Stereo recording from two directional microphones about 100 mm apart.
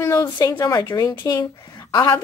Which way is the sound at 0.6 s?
40° left (ahead or behind).